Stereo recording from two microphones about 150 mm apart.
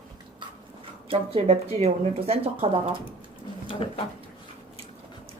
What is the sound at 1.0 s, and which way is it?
Speech, 40° right (ahead or behind).